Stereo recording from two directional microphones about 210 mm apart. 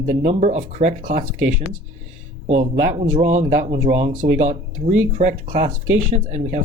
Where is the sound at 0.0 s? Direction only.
40° right (ahead or behind).